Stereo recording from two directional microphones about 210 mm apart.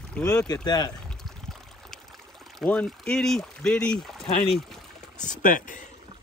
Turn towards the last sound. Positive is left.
turn(degrees=40)  # may be behind; listen again after turning